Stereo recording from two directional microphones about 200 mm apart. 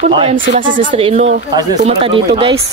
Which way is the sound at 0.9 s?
30° right (ahead or behind).